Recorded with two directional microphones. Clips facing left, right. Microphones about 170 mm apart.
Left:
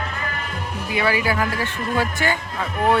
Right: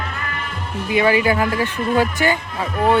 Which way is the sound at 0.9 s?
20° right (ahead or behind).